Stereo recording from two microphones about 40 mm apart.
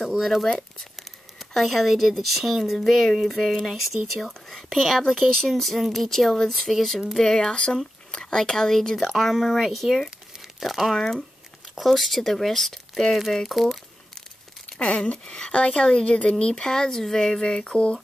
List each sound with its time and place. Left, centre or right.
0.0 s speech: centre
4.3 s speech: centre
7.5 s speech: left
8.9 s speech: centre
14.8 s speech: left
17.4 s speech: left